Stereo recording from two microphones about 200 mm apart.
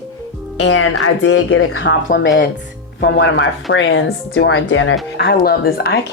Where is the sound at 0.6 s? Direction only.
85° left; by 3.4 s 60° left (ahead or behind).